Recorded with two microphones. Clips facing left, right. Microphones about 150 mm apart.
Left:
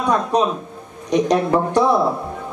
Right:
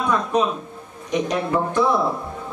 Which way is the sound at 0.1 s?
35° left (ahead or behind).